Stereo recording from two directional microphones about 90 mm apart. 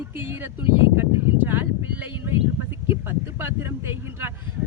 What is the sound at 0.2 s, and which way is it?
Speech, 25° right (ahead or behind).